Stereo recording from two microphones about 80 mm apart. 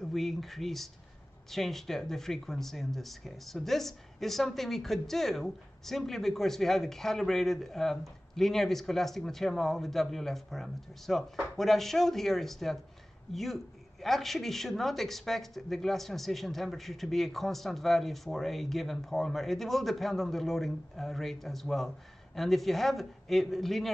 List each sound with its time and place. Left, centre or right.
0.0 s speech: centre